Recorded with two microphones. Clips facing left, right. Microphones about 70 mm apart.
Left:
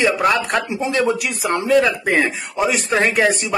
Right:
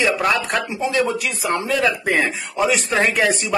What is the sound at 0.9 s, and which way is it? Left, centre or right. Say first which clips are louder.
Speech: left 2 dB; left.